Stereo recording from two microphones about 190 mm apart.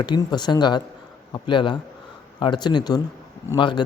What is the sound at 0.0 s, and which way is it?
A man's voice, 25° left (ahead or behind).